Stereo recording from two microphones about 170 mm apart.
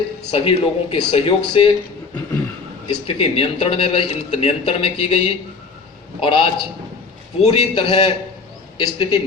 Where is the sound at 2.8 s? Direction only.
35° left (ahead or behind).